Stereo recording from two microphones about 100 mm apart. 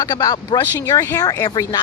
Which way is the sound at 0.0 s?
40° left (ahead or behind).